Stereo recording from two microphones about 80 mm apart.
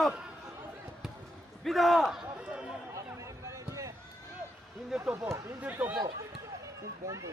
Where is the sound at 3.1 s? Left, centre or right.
Right.